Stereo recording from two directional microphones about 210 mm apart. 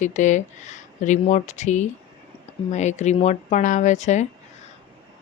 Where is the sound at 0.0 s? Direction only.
35° left (ahead or behind).